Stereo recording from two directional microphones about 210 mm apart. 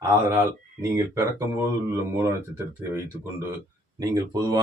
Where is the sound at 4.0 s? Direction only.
15° right (ahead or behind).